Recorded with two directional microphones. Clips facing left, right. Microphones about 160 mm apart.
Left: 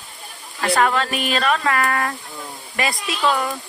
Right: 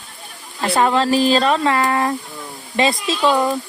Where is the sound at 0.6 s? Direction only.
25° right (ahead or behind).